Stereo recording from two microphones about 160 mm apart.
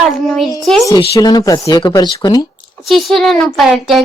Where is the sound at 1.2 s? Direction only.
25° left (ahead or behind).